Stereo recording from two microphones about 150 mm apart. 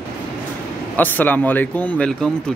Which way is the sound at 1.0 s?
10° left (ahead or behind).